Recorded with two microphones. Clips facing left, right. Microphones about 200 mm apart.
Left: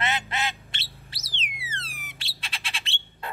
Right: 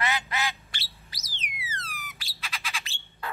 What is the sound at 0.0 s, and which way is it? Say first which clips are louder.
Duck: left 1 dB; 25° left (ahead or behind).